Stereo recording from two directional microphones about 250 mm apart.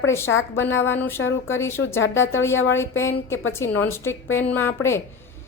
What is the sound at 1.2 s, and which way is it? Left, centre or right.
Speech, left.